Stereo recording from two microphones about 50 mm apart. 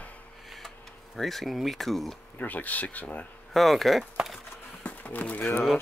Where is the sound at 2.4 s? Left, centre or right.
Left.